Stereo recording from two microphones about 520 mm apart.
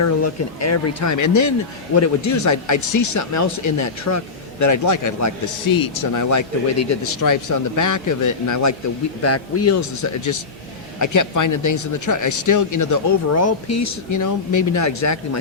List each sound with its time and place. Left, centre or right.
0.0 s a man's voice: left